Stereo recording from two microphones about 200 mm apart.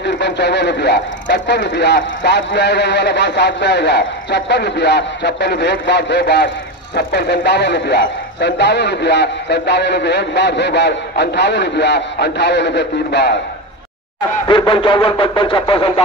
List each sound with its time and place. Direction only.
0.0 s speech: 60° left (ahead or behind)
14.5 s radio: 25° left (ahead or behind)